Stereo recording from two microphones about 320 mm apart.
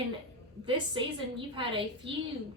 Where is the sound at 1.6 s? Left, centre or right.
Centre.